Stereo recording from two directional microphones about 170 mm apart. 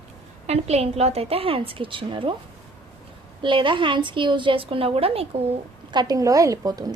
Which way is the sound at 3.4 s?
30° right (ahead or behind).